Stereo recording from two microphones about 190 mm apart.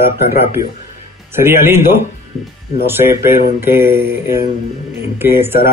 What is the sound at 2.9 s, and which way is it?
Speech, 10° right (ahead or behind).